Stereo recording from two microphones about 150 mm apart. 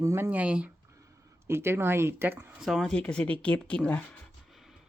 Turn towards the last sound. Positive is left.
turn(degrees=5)  # may be behind; listen again after turning